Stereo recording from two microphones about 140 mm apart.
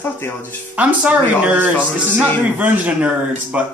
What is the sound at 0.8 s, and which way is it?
Speech, 10° right (ahead or behind).